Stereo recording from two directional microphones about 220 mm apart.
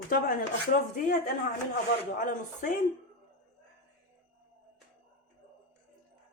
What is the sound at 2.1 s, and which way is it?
Speech, 35° left (ahead or behind).